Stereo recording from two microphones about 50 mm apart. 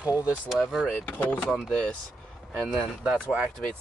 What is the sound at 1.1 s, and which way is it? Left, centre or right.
Speech, left.